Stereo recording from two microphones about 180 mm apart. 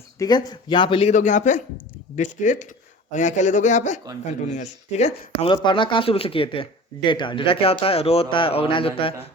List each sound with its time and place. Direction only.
0.2 s a man's voice: 25° left (ahead or behind)